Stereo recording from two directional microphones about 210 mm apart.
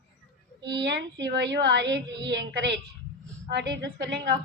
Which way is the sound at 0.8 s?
55° right (ahead or behind).